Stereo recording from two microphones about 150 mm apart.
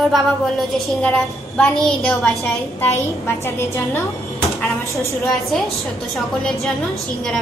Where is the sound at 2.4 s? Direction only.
15° left (ahead or behind).